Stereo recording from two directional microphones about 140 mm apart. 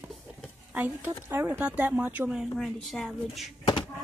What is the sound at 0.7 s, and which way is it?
Speech, 15° right (ahead or behind).